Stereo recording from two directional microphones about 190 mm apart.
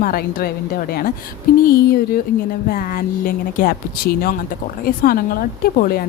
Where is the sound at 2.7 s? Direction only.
50° left (ahead or behind).